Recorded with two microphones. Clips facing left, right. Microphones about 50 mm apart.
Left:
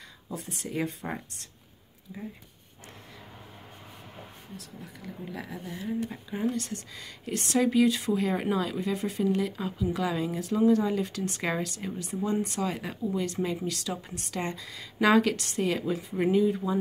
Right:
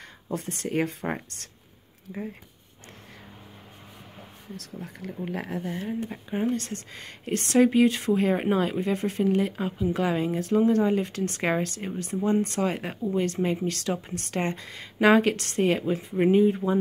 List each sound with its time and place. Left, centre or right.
0.3 s speech: right
4.7 s speech: right